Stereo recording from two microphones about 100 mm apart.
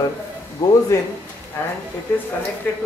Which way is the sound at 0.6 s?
35° left (ahead or behind).